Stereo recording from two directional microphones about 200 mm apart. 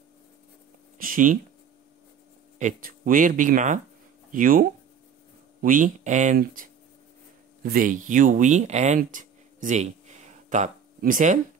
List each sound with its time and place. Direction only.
1.0 s speech: 40° right (ahead or behind)
2.6 s speech: 40° right (ahead or behind)